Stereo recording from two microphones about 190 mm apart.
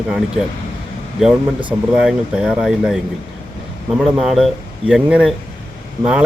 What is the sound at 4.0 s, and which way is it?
Speech, centre (ahead or behind).